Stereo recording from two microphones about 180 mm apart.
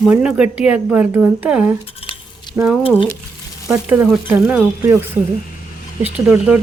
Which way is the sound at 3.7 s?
10° right (ahead or behind).